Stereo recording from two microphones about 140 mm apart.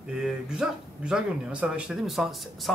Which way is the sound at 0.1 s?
5° right (ahead or behind).